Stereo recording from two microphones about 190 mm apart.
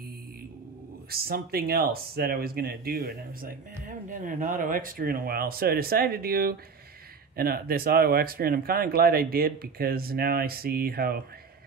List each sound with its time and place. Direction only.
1.1 s speech: 50° right (ahead or behind)